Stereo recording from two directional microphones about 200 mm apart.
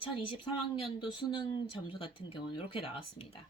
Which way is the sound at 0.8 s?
25° left (ahead or behind).